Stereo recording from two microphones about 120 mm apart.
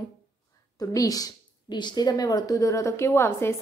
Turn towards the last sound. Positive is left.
turn(degrees=20)  # may be behind; listen again after turning